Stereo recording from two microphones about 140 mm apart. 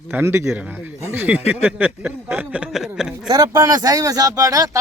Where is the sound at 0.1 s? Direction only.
15° right (ahead or behind).